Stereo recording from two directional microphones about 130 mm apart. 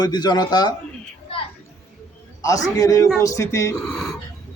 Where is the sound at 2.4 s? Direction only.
25° left (ahead or behind).